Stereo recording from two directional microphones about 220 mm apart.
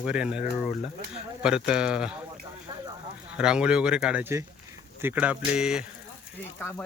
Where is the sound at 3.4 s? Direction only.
5° right (ahead or behind).